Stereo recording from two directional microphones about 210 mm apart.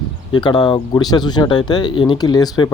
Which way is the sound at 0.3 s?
20° left (ahead or behind).